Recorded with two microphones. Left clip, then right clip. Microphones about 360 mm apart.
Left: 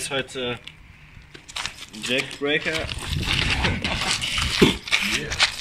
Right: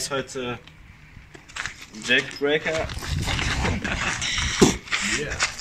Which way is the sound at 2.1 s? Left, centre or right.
Right.